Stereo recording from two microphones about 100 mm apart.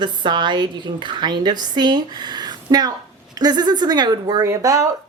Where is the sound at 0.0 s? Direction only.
50° right (ahead or behind).